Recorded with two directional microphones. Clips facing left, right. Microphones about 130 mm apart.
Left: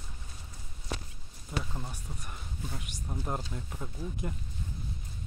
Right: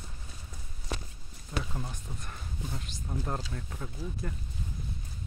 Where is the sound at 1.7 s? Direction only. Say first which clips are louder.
Right 2 dB; 5° left (ahead or behind).